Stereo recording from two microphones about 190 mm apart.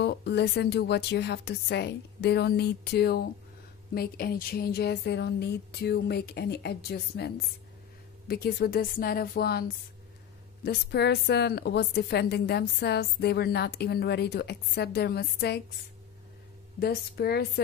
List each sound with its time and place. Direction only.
0.0 s a woman's voice: 60° left (ahead or behind)
16.8 s a woman's voice: 55° left (ahead or behind)